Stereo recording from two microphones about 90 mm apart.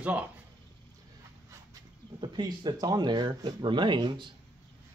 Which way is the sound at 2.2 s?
50° right (ahead or behind).